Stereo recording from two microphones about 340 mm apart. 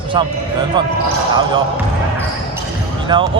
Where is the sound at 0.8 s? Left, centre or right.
Centre.